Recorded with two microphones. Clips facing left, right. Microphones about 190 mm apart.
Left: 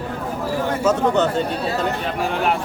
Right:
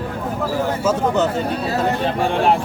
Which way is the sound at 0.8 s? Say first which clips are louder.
Left 2 dB; 5° right (ahead or behind).